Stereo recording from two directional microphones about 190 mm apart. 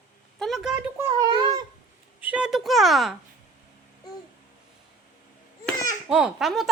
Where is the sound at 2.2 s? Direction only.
5° right (ahead or behind).